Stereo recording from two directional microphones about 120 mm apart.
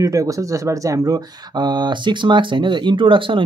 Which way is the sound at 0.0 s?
30° right (ahead or behind).